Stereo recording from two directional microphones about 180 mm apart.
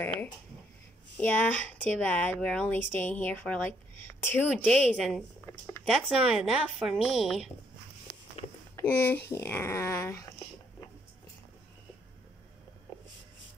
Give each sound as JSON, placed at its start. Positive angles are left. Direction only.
{"t": 1.2, "sound": "speech", "side_deg": 10}
{"t": 8.7, "sound": "speech", "side_deg": 10}